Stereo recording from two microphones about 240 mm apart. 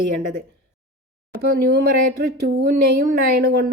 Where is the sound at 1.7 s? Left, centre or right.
Right.